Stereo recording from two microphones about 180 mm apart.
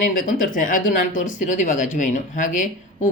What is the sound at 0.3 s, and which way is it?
Speech, 45° left (ahead or behind).